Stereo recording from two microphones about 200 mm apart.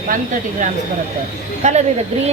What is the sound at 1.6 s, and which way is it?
Speech, 35° right (ahead or behind).